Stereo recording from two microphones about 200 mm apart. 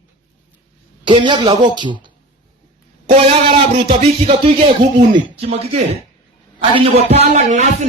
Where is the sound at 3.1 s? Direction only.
25° right (ahead or behind).